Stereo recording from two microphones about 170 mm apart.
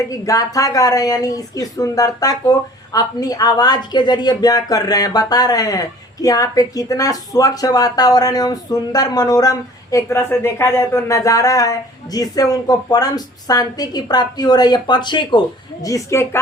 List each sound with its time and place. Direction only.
0.1 s speech: 20° left (ahead or behind)